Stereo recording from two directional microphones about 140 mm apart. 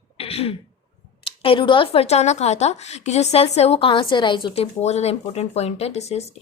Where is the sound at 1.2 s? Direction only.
40° left (ahead or behind).